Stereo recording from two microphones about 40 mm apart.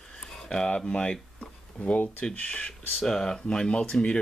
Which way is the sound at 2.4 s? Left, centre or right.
Left.